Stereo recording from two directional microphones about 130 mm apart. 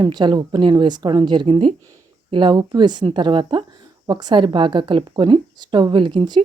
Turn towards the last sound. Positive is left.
turn(degrees=-40)  # may be behind; listen again after turning